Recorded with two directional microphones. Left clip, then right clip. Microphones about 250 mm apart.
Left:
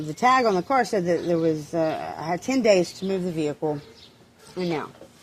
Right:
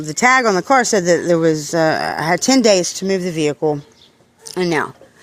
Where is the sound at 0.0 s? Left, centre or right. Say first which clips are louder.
Right 6 dB; right.